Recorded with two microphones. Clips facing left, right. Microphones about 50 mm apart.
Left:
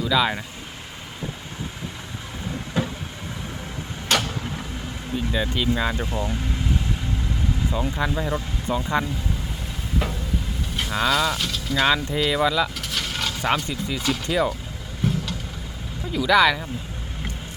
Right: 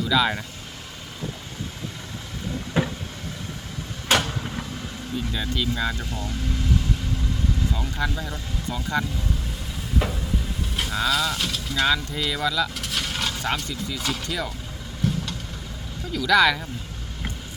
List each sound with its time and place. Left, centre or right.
0.0 s speech: centre
4.1 s a sound: centre
5.1 s speech: centre
7.7 s speech: centre
10.0 s stir: centre
10.9 s speech: centre
11.9 s speech: left
12.8 s a sound: centre
13.4 s speech: left
15.0 s vehicle: centre
16.1 s speech: centre
16.4 s speech: centre